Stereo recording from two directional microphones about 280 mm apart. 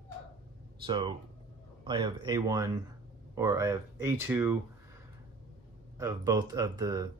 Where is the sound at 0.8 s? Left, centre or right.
Centre.